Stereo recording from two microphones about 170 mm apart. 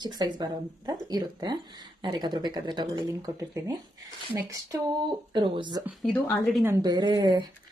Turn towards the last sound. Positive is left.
turn(degrees=-25)  # may be behind; listen again after turning